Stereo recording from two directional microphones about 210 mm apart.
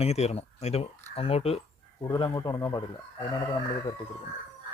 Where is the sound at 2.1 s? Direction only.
15° left (ahead or behind).